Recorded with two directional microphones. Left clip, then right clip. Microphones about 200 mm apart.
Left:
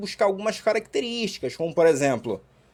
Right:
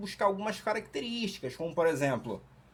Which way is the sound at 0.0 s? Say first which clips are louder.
Left 7 dB; 35° left (ahead or behind).